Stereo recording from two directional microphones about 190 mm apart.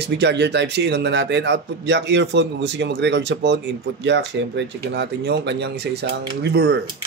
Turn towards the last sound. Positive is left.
turn(degrees=-60)  # may be behind; listen again after turning